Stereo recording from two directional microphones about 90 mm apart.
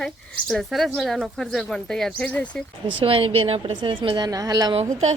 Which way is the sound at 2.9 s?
90° right.